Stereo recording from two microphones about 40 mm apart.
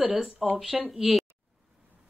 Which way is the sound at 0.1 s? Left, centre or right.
Centre.